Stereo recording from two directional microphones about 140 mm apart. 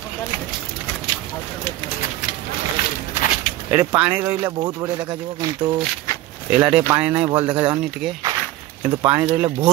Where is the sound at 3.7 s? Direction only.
15° right (ahead or behind).